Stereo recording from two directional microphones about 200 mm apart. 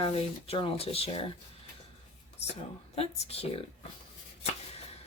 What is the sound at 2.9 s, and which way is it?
Speech, 30° left (ahead or behind).